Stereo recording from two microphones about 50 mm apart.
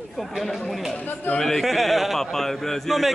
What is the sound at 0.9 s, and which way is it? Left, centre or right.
Speech, left.